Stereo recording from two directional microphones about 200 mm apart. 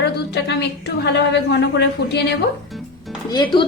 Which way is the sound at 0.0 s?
60° left (ahead or behind).